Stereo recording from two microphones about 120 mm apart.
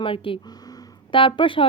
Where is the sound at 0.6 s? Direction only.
45° left (ahead or behind).